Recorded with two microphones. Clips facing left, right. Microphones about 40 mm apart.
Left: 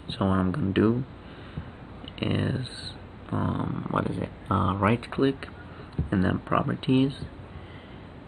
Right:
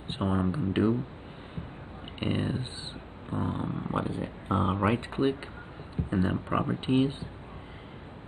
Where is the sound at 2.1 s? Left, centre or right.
Centre.